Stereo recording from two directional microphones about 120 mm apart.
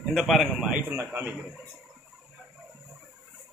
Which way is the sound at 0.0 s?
Centre (ahead or behind).